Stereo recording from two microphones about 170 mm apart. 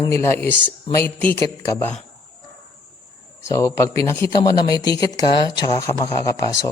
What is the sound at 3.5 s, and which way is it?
Speech, 20° left (ahead or behind).